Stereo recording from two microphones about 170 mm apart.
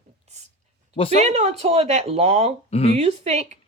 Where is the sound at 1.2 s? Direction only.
40° right (ahead or behind).